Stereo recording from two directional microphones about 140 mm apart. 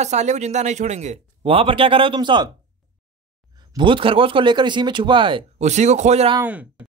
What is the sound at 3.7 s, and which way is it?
A man's voice, 35° right (ahead or behind).